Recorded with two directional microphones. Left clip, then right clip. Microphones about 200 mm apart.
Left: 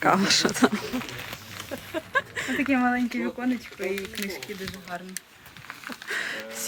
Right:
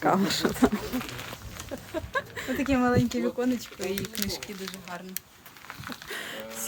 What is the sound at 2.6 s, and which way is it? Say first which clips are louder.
Speech: left 1 dB; 70° right (ahead or behind).